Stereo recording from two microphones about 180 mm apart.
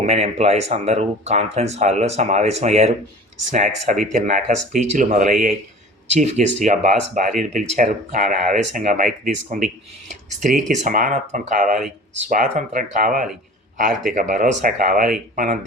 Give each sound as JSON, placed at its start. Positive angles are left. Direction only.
{"t": 0.0, "sound": "speech", "side_deg": -35}